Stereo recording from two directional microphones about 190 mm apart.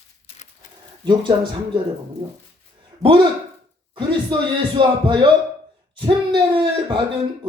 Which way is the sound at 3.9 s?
25° right (ahead or behind).